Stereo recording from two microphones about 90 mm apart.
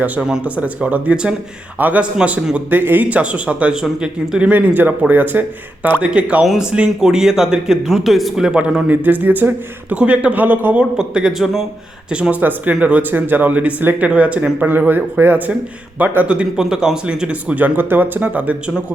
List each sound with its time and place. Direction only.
0.0 s a man's voice: 10° right (ahead or behind)
10.9 s a man's voice: 10° right (ahead or behind)